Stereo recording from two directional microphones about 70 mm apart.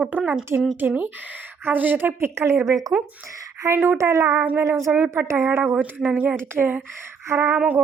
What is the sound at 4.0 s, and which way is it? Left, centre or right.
Speech, right.